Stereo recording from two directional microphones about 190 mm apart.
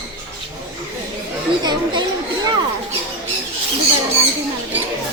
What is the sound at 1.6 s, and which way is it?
Speech, 25° right (ahead or behind).